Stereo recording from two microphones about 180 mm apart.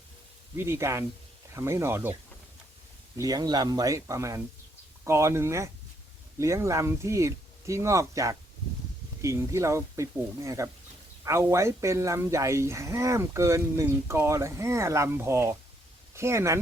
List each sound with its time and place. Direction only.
0.5 s speech: 15° right (ahead or behind)
3.2 s speech: 20° right (ahead or behind)